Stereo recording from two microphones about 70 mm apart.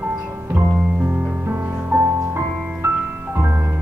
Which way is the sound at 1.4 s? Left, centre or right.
Right.